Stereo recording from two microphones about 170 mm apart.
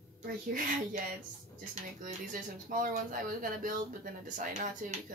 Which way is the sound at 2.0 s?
55° right (ahead or behind).